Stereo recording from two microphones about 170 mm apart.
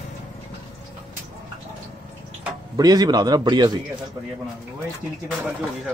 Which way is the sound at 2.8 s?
25° right (ahead or behind).